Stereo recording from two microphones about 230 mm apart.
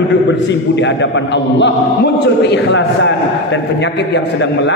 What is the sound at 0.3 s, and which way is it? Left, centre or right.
A man's voice, left.